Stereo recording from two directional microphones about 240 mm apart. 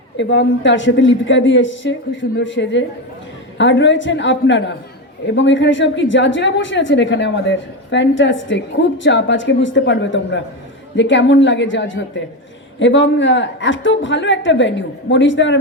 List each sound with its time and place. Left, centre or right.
0.2 s a woman's voice: left